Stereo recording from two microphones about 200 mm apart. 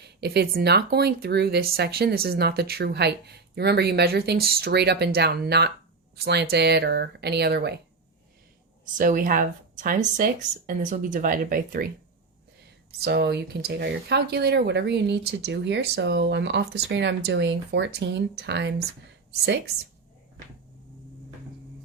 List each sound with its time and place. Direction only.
0.0 s speech: 55° right (ahead or behind)
9.0 s speech: 45° right (ahead or behind)
13.1 s speech: 55° right (ahead or behind)